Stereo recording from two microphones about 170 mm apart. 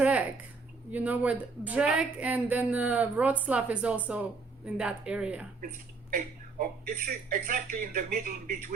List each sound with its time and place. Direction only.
0.0 s a sound: 10° right (ahead or behind)
0.9 s a woman's voice: 10° right (ahead or behind)
6.1 s speech: 55° right (ahead or behind)